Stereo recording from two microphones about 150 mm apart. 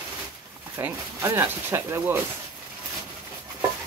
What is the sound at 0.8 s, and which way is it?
Speech, 15° right (ahead or behind).